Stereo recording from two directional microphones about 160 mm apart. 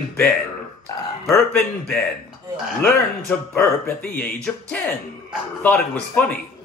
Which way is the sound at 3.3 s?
10° left (ahead or behind).